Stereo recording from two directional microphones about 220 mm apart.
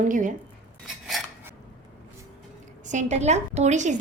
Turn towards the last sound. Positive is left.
turn(degrees=-30)  # may be behind; listen again after turning